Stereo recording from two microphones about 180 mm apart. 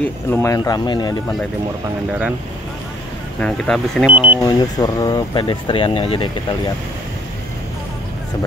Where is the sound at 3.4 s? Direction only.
Centre (ahead or behind).